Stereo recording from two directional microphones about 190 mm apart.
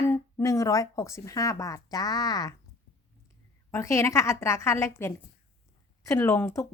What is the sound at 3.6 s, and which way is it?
A woman's voice, 15° left (ahead or behind).